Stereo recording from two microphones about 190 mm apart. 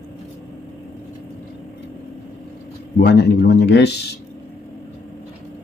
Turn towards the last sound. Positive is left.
turn(degrees=60)  # may be behind; listen again after turning